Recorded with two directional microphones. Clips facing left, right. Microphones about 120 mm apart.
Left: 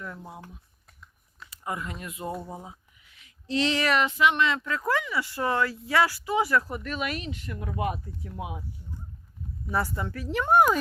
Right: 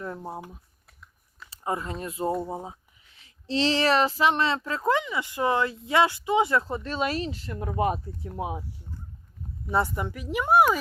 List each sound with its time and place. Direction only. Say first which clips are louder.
0.0 s speech: right 5 dB; 35° right (ahead or behind)
1.5 s a child's voice: right 4 dB; 30° right (ahead or behind)
9.7 s speech: right 3 dB; 20° right (ahead or behind)